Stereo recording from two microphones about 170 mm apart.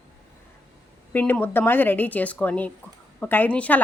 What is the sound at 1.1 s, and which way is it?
Speech, 10° left (ahead or behind).